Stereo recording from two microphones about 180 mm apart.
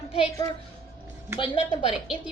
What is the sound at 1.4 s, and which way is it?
Speech, 35° left (ahead or behind).